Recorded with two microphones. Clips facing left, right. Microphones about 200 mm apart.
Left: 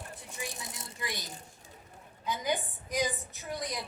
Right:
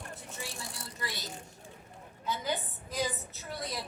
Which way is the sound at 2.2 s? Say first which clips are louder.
Left 2 dB; 15° left (ahead or behind).